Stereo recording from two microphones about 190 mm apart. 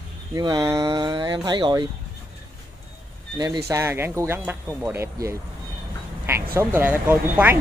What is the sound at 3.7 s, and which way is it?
Speech, 15° right (ahead or behind).